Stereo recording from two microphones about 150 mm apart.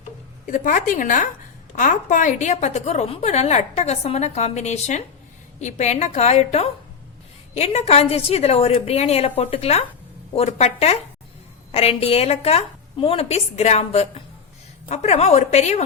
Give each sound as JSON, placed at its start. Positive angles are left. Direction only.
{"t": 0.4, "sound": "a woman's voice", "side_deg": 60}